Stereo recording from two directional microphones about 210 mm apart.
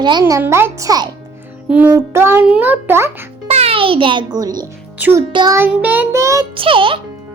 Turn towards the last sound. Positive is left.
turn(degrees=-25)  # may be behind; listen again after turning